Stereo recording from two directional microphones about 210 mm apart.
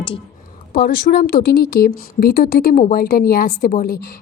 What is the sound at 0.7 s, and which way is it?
Speech, 45° left (ahead or behind).